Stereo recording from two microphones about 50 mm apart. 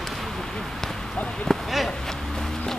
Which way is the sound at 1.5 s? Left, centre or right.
Centre.